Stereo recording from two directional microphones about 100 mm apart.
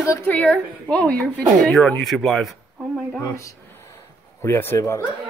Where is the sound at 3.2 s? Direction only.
30° left (ahead or behind).